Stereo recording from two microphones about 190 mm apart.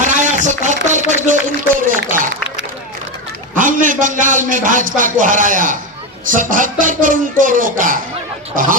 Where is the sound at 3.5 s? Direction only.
45° right (ahead or behind).